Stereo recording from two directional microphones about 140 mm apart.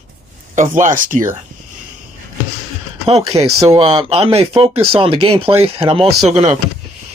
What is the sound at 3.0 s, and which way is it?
Speech, 45° right (ahead or behind).